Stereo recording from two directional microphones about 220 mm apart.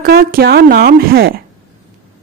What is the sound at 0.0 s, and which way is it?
Speech, 40° right (ahead or behind).